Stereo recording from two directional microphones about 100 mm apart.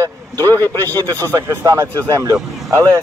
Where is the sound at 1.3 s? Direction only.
30° right (ahead or behind).